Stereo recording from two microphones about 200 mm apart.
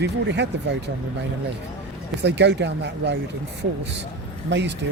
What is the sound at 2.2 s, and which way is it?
Speech, 60° right (ahead or behind).